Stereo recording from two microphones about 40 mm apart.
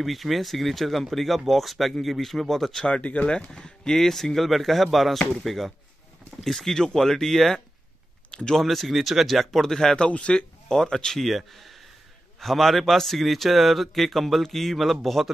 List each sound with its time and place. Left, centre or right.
0.0 s a man's voice: centre
2.9 s a man's voice: left; by 10.0 s centre
10.0 s speech: left
10.7 s speech: centre
11.1 s a man's voice: centre